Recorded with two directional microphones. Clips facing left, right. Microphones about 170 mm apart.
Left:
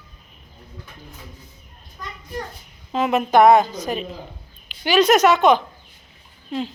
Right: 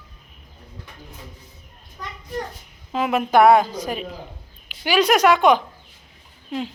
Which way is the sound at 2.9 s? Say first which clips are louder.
Left 1 dB; 10° right (ahead or behind).